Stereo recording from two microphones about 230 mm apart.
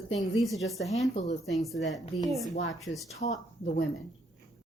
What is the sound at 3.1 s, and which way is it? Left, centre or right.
Speech, left.